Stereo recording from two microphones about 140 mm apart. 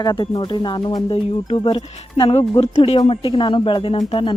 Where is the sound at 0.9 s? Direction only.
45° left (ahead or behind).